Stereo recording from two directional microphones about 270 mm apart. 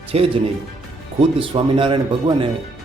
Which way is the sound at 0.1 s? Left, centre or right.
Right.